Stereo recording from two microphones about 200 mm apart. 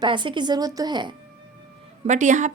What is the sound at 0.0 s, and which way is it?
Speech, 25° right (ahead or behind).